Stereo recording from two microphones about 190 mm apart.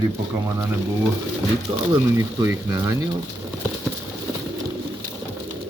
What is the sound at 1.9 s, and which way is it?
Speech, 15° right (ahead or behind).